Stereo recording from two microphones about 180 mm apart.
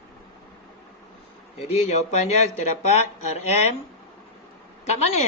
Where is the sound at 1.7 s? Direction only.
40° left (ahead or behind).